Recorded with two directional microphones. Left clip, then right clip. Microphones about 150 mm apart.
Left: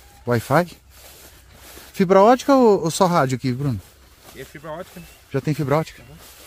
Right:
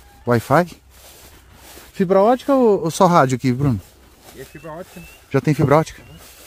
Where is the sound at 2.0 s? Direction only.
15° left (ahead or behind).